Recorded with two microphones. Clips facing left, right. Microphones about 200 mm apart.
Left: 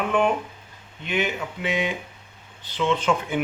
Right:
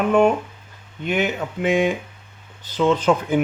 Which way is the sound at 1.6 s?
45° right (ahead or behind).